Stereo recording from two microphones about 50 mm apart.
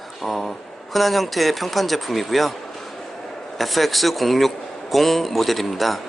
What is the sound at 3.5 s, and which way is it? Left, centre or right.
A man's voice, centre.